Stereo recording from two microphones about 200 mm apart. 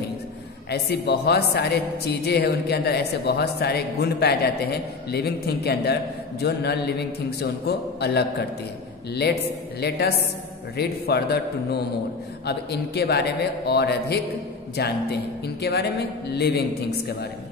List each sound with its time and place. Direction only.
0.7 s a man's voice: 55° left (ahead or behind)